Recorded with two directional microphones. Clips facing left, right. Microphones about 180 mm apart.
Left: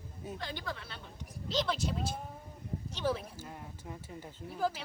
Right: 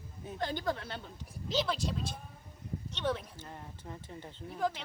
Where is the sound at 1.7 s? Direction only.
5° left (ahead or behind).